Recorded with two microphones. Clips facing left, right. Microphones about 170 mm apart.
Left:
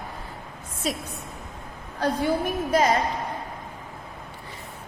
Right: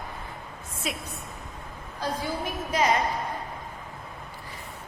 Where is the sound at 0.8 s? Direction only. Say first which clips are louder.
Left 5 dB; 40° left (ahead or behind).